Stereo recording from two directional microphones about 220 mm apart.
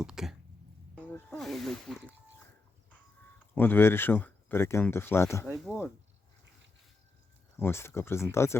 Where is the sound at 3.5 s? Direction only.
10° left (ahead or behind).